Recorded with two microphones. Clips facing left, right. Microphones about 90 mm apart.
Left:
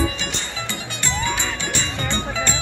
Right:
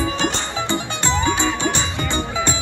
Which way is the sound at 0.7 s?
25° right (ahead or behind).